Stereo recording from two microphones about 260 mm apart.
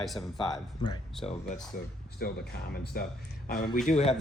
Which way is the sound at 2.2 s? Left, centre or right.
Left.